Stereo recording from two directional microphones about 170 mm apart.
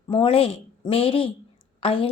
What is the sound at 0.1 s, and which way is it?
A woman's voice, 35° left (ahead or behind).